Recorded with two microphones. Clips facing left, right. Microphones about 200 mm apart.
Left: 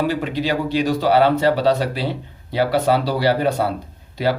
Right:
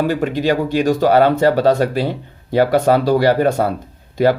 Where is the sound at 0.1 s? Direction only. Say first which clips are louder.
Right 4 dB; 45° right (ahead or behind).